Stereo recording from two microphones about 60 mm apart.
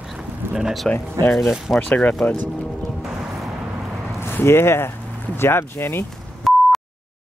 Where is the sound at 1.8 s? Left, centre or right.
Left.